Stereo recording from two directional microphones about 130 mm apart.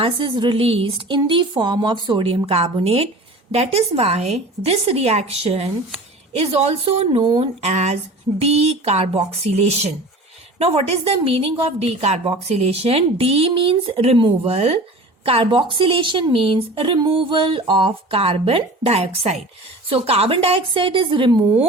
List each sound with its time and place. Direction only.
0.0 s a woman's voice: 35° right (ahead or behind)
7.2 s a woman's voice: 35° right (ahead or behind)
7.4 s a sound: 55° right (ahead or behind)
8.4 s a woman's voice: 50° right (ahead or behind)